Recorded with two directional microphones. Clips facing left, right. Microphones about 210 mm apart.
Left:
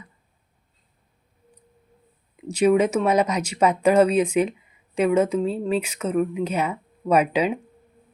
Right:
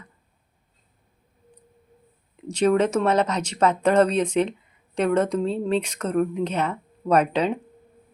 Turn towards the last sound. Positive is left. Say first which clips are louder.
# left 1 dB
turn(degrees=10)  # may be behind; listen again after turning